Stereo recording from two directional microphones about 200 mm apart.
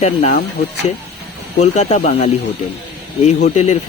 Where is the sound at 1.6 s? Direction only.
35° left (ahead or behind).